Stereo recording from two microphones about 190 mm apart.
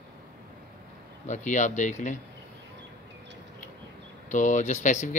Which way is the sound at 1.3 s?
40° left (ahead or behind).